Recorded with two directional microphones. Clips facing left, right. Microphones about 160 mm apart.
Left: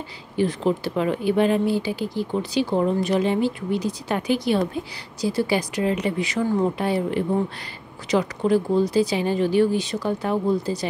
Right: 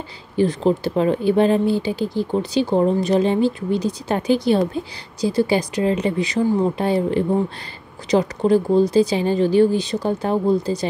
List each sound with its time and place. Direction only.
0.4 s a woman's voice: 35° right (ahead or behind)